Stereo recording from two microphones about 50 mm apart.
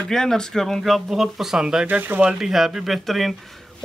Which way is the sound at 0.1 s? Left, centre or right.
Centre.